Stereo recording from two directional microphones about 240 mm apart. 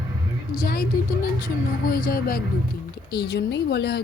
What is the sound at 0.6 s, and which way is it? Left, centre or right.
Speech, left.